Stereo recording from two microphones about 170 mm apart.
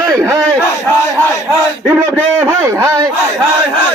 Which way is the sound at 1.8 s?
15° right (ahead or behind).